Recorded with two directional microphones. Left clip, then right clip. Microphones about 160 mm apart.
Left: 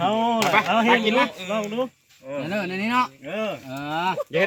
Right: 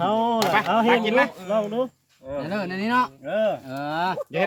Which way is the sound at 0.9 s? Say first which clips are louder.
Even; 35° left (ahead or behind).